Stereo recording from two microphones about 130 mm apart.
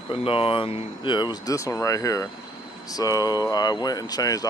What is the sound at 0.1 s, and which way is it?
Speech, 45° left (ahead or behind).